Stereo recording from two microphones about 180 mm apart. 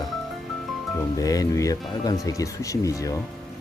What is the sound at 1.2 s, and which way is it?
Speech, 20° left (ahead or behind).